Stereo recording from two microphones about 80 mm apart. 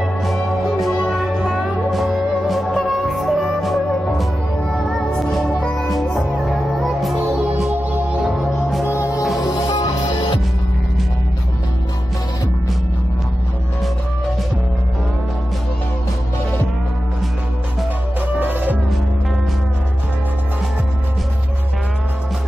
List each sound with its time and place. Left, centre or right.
0.0 s music: centre
7.7 s music: centre
8.4 s music: centre
8.9 s music: left
9.6 s music: left
18.4 s music: right